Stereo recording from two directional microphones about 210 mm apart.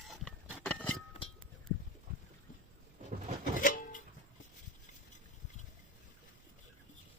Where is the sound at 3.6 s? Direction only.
40° left (ahead or behind).